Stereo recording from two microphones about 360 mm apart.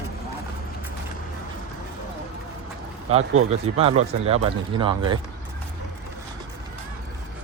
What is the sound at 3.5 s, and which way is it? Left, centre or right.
A man's voice, centre.